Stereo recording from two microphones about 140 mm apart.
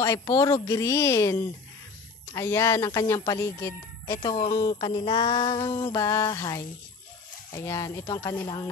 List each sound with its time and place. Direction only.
0.0 s speech: 20° left (ahead or behind)
5.8 s speech: 20° left (ahead or behind)
7.6 s speech: 20° left (ahead or behind)